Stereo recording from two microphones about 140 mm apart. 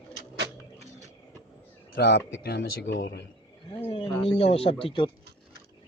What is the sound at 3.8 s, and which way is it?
Speech, 40° left (ahead or behind).